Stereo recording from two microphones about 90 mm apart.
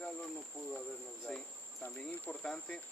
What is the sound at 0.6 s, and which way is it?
Speech, 20° left (ahead or behind).